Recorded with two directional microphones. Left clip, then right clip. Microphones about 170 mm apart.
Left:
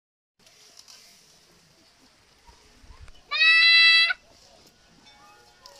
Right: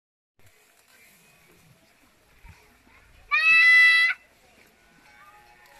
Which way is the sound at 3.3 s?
75° left (ahead or behind).